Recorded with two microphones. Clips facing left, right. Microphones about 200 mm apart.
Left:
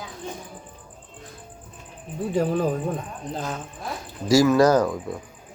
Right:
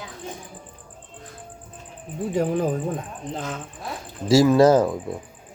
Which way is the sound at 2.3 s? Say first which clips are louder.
Even; 15° right (ahead or behind).